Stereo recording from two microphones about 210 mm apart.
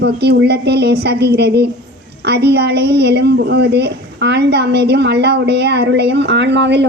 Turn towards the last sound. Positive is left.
turn(degrees=-55)  # may be behind; listen again after turning